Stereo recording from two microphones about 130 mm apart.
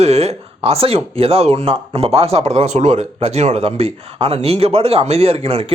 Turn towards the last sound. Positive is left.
turn(degrees=-45)  # may be behind; listen again after turning